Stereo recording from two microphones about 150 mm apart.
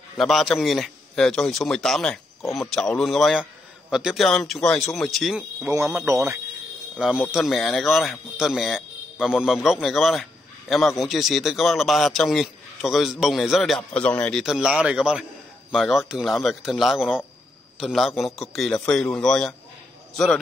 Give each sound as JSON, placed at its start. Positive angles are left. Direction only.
{"t": 0.2, "sound": "a man's voice", "side_deg": 0}
{"t": 5.6, "sound": "speech", "side_deg": -20}
{"t": 7.0, "sound": "a man's voice", "side_deg": -5}